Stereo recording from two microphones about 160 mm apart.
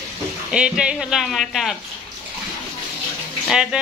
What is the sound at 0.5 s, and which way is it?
Speech, 5° right (ahead or behind).